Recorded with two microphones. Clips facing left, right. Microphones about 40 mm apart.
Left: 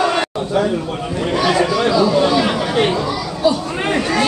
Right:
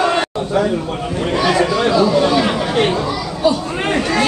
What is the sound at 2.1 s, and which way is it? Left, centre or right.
Chatter, centre.